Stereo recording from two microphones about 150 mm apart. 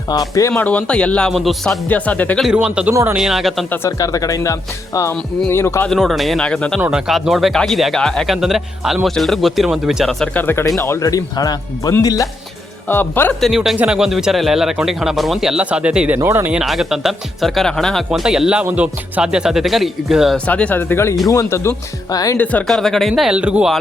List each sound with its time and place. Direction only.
0.1 s speech: 25° left (ahead or behind)
0.5 s speech: 10° left (ahead or behind)
2.4 s a man's voice: 5° right (ahead or behind)
2.9 s speech: 20° right (ahead or behind)
3.2 s a man's voice: centre (ahead or behind)
3.7 s speech: 20° left (ahead or behind)
5.9 s a man's voice: centre (ahead or behind)
10.4 s speech: 15° left (ahead or behind)
13.4 s a man's voice: centre (ahead or behind)
20.5 s speech: 10° left (ahead or behind)
22.4 s a man's voice: 5° left (ahead or behind)